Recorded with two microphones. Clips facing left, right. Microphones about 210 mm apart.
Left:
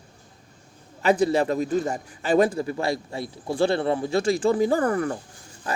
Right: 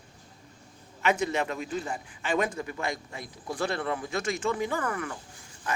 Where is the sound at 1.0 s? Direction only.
35° left (ahead or behind).